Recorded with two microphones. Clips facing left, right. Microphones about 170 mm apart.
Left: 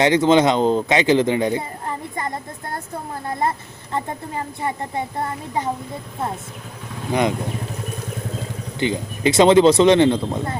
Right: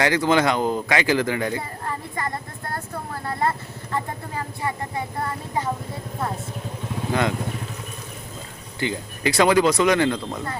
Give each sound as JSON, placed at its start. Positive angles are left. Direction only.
{"t": 0.0, "sound": "speech", "side_deg": 20}
{"t": 7.1, "sound": "speech", "side_deg": 15}
{"t": 8.8, "sound": "speech", "side_deg": 20}